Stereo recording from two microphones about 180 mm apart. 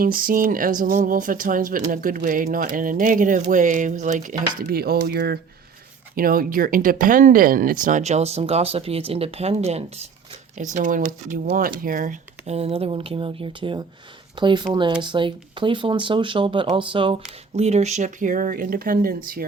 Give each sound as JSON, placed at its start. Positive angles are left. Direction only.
{"t": 0.0, "sound": "speech", "side_deg": -50}
{"t": 6.1, "sound": "speech", "side_deg": -50}